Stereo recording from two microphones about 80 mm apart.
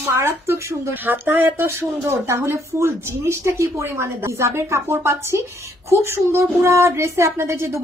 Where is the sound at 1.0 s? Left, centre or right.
Right.